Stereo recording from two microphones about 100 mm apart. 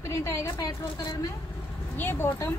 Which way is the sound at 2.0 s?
20° left (ahead or behind).